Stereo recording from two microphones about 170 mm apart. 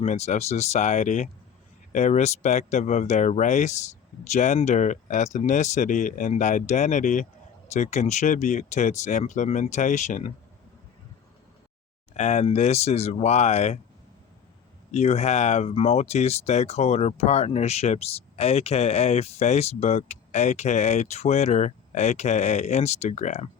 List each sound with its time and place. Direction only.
0.0 s speech: 40° left (ahead or behind)
12.1 s speech: 40° left (ahead or behind)
14.9 s speech: 40° left (ahead or behind)